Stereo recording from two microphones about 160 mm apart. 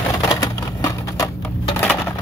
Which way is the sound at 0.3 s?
20° left (ahead or behind).